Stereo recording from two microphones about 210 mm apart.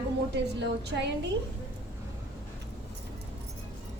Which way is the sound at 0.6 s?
55° right (ahead or behind).